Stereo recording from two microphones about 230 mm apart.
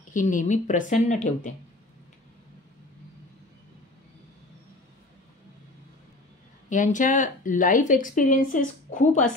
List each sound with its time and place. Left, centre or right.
0.1 s speech: left
6.7 s speech: left